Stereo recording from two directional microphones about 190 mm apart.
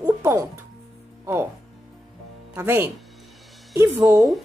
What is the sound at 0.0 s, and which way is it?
Music, 15° right (ahead or behind).